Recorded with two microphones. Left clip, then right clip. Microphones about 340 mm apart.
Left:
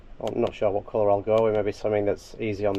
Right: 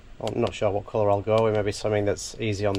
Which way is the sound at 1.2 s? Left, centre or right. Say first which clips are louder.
Even; centre.